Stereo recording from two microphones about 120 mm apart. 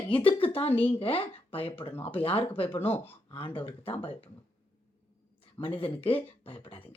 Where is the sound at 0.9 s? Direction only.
50° left (ahead or behind).